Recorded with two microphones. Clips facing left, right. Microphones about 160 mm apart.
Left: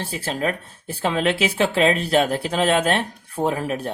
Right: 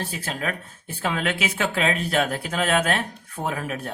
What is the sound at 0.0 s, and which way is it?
Speech, 30° left (ahead or behind).